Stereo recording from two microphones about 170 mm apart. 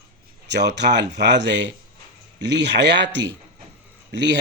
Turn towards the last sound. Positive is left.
turn(degrees=-90)